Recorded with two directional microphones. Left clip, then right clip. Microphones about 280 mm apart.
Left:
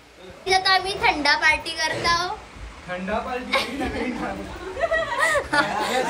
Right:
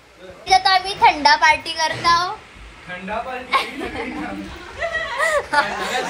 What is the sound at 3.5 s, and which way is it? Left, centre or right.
Child singing, centre.